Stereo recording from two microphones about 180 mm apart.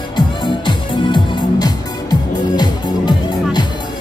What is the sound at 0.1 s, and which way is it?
Music, 25° left (ahead or behind).